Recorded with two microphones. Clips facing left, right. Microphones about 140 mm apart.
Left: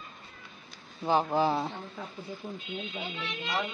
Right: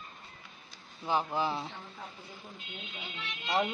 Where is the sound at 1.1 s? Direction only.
35° left (ahead or behind).